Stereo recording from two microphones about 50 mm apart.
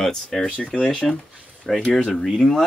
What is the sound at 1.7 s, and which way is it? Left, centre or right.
Speech, centre.